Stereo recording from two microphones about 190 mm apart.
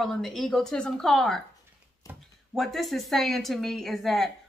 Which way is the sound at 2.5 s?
Centre (ahead or behind).